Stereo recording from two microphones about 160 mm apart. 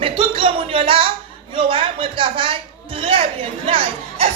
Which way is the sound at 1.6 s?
35° right (ahead or behind).